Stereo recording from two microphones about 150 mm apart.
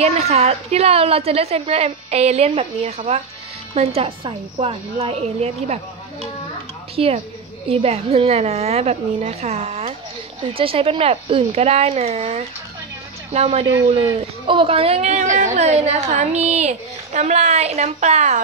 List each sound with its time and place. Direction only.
0.0 s a woman's voice: 45° right (ahead or behind)
7.0 s a woman's voice: 40° right (ahead or behind)